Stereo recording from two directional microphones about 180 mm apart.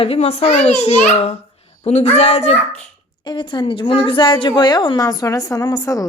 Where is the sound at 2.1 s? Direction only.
35° left (ahead or behind).